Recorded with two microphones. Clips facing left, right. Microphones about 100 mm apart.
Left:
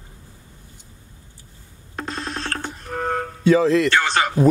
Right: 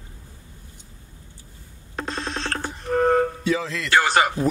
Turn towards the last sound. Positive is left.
turn(degrees=-5)  # may be behind; listen again after turning